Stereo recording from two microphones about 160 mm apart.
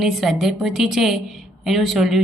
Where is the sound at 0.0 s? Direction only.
Centre (ahead or behind).